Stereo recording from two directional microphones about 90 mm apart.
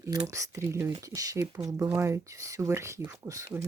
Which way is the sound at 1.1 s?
40° right (ahead or behind).